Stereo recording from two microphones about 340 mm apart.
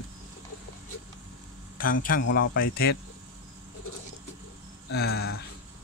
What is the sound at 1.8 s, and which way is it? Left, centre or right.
Speech, left.